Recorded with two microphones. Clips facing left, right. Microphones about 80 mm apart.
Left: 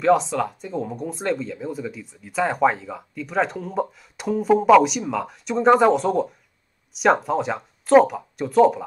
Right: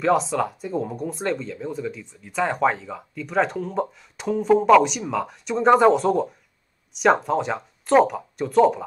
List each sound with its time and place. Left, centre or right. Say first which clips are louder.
0.0 s speech: left 2 dB; centre